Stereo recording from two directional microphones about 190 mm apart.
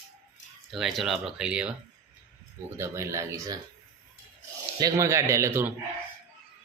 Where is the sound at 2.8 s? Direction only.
15° right (ahead or behind).